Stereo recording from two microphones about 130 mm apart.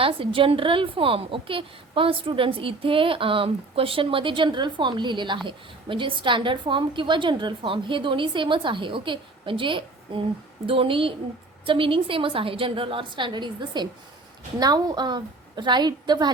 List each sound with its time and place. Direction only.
0.0 s a woman's voice: 45° right (ahead or behind)